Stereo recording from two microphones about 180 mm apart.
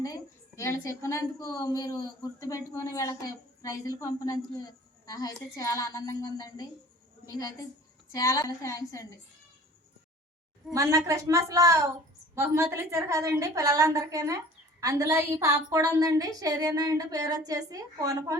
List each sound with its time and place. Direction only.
0.0 s a woman's voice: 15° left (ahead or behind)
10.8 s a woman's voice: 20° right (ahead or behind)